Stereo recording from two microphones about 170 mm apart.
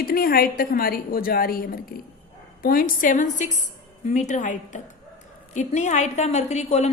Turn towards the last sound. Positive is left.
turn(degrees=40)  # may be behind; listen again after turning